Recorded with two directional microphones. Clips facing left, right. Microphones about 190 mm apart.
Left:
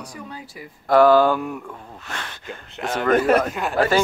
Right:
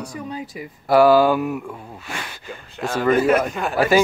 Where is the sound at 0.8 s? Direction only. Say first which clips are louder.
Right 1 dB; 10° right (ahead or behind).